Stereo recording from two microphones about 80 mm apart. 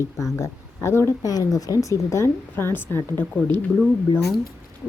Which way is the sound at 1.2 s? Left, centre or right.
Left.